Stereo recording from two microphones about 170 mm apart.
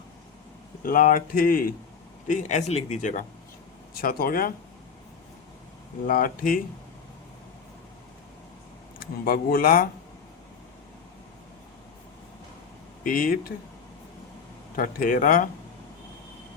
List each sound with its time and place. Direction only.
0.8 s speech: 55° left (ahead or behind)
3.9 s speech: 60° left (ahead or behind)
6.1 s speech: 55° left (ahead or behind)
9.0 s speech: 60° left (ahead or behind)
13.1 s speech: 55° left (ahead or behind)
14.8 s speech: 55° left (ahead or behind)